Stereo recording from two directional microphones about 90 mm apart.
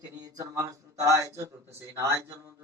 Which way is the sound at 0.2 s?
40° right (ahead or behind).